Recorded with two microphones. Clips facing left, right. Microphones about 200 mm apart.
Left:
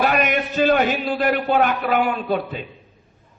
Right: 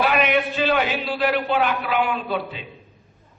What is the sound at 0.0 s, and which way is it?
A man's voice, 45° left (ahead or behind).